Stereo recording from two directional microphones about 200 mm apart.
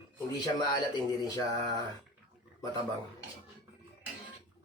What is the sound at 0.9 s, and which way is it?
Speech, 20° left (ahead or behind).